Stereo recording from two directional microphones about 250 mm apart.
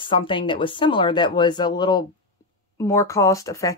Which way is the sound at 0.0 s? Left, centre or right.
Centre.